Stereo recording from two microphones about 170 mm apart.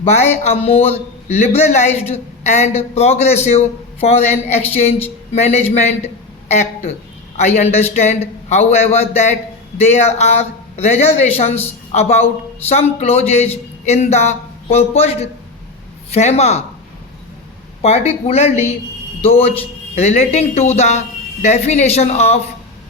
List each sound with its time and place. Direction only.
0.1 s a man's voice: 40° left (ahead or behind)
17.8 s a man's voice: 40° left (ahead or behind)